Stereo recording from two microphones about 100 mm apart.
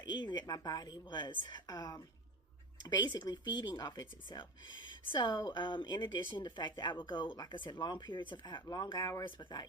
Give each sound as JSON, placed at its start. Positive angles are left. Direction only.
{"t": 0.0, "sound": "speech", "side_deg": 50}
{"t": 9.4, "sound": "speech", "side_deg": 50}